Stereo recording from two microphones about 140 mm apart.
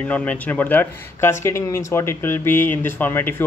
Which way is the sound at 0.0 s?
10° left (ahead or behind).